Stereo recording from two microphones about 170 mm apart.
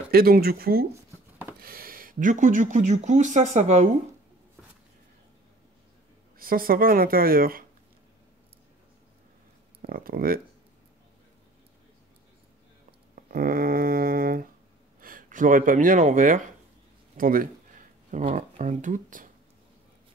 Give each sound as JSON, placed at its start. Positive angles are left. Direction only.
{"t": 0.1, "sound": "speech", "side_deg": -65}
{"t": 6.3, "sound": "speech", "side_deg": -60}
{"t": 9.8, "sound": "speech", "side_deg": -60}
{"t": 13.1, "sound": "a sound", "side_deg": -60}
{"t": 15.0, "sound": "speech", "side_deg": -55}
{"t": 17.2, "sound": "a sound", "side_deg": -55}